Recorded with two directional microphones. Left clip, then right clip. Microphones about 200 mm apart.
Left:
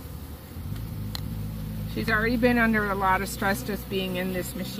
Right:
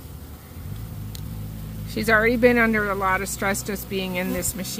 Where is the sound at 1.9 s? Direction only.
45° right (ahead or behind).